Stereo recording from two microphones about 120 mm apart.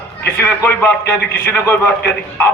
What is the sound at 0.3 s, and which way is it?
A man's voice, 20° left (ahead or behind).